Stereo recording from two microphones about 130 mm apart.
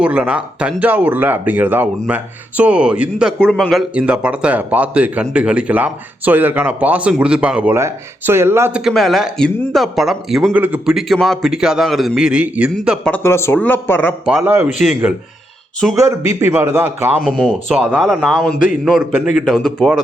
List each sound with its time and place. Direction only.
0.0 s speech: 10° right (ahead or behind)
3.3 s speech: 5° left (ahead or behind)
7.8 s speech: 20° right (ahead or behind)
8.8 s a man's voice: centre (ahead or behind)
13.1 s speech: 15° left (ahead or behind)
14.4 s speech: 20° right (ahead or behind)
14.7 s a man's voice: 5° right (ahead or behind)
16.2 s a man's voice: 55° left (ahead or behind)
16.5 s speech: 20° right (ahead or behind)
17.2 s speech: 10° left (ahead or behind)
17.5 s a man's voice: 10° right (ahead or behind)